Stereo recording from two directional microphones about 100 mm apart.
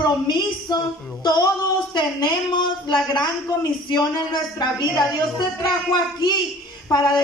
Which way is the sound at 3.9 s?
45° left (ahead or behind).